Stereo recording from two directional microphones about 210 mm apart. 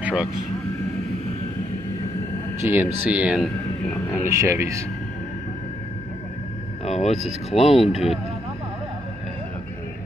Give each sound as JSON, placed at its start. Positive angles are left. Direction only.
{"t": 0.0, "sound": "speech", "side_deg": -5}
{"t": 2.6, "sound": "speech", "side_deg": -10}
{"t": 6.8, "sound": "vehicle", "side_deg": 30}
{"t": 7.5, "sound": "speech", "side_deg": 30}
{"t": 7.9, "sound": "speech", "side_deg": 0}